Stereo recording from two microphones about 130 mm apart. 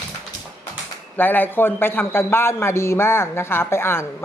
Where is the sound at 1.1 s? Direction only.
15° left (ahead or behind).